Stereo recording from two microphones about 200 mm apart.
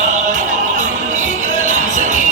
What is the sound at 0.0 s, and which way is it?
Music, 40° right (ahead or behind).